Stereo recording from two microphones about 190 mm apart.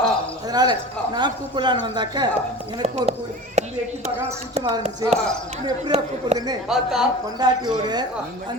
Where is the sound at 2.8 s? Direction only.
35° right (ahead or behind).